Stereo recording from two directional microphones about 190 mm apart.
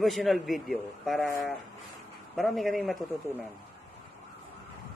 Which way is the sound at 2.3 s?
Centre (ahead or behind).